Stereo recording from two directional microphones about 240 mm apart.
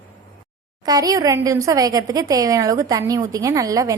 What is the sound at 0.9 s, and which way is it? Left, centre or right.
A woman's voice, centre.